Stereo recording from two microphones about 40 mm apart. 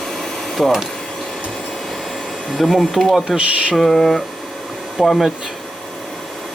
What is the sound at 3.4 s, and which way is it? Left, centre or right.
Speech, right.